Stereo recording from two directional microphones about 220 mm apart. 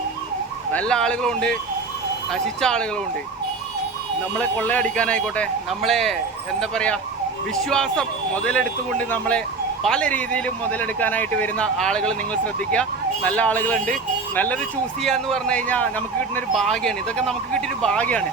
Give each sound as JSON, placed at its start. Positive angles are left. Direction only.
{"t": 0.7, "sound": "speech", "side_deg": 5}
{"t": 4.4, "sound": "speech", "side_deg": 5}